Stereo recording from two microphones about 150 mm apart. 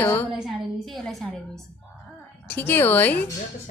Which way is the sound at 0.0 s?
15° left (ahead or behind).